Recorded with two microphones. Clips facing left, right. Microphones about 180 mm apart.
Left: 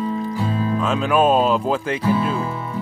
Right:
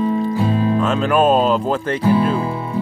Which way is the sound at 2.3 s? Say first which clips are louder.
Right 4 dB; 30° right (ahead or behind).